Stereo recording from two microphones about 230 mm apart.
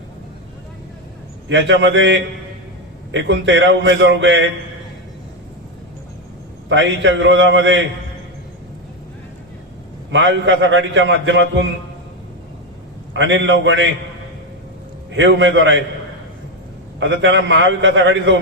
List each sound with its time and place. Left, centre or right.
1.5 s a man's voice: right
6.7 s a man's voice: right
10.1 s a man's voice: right
13.1 s a man's voice: right
15.1 s a man's voice: right
17.0 s a man's voice: right